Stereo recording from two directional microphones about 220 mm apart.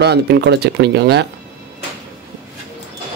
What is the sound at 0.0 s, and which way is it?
A man's voice, 50° right (ahead or behind).